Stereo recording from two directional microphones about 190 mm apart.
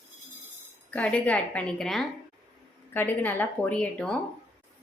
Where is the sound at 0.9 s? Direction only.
5° left (ahead or behind).